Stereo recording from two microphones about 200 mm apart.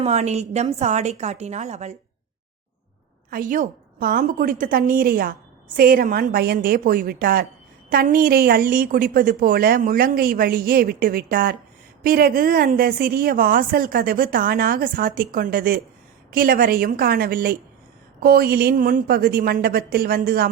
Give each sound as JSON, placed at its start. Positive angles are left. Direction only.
{"t": 0.0, "sound": "a woman's voice", "side_deg": -35}
{"t": 3.2, "sound": "a woman's voice", "side_deg": -45}